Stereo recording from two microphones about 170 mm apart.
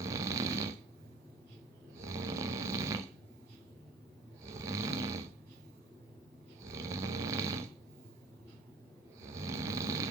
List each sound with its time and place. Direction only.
0.0 s snoring: 20° right (ahead or behind)
2.0 s snoring: 20° right (ahead or behind)
4.4 s snoring: 20° right (ahead or behind)
6.6 s snoring: 20° right (ahead or behind)
9.2 s snoring: 20° right (ahead or behind)